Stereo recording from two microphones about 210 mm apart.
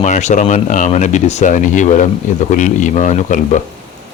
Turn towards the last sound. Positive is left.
turn(degrees=35)  # may be behind; listen again after turning